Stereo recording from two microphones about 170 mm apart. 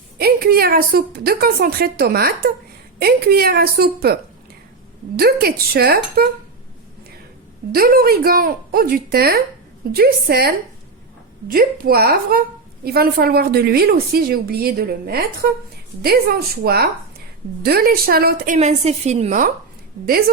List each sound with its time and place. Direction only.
0.2 s a woman's voice: 65° right (ahead or behind)
7.7 s a woman's voice: 60° right (ahead or behind)
11.5 s a woman's voice: 60° right (ahead or behind)